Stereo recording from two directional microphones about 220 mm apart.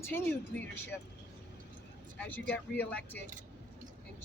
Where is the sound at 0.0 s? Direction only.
10° left (ahead or behind).